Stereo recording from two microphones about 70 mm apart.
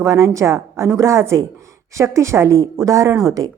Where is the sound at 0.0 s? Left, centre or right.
Right.